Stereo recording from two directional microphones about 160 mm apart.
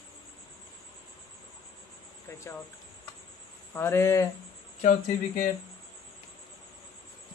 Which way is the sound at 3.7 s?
15° left (ahead or behind).